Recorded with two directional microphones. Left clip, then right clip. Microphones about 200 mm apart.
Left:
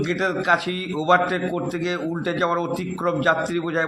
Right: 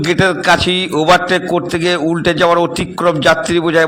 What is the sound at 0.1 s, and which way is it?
A man's voice, 35° right (ahead or behind).